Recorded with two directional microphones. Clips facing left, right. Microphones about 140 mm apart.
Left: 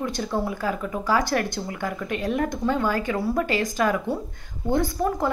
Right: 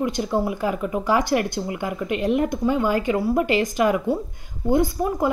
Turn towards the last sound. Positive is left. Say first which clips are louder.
# right 2 dB
turn(degrees=-15)  # may be behind; listen again after turning